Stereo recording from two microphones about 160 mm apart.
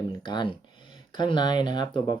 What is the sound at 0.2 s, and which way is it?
Speech, 30° left (ahead or behind).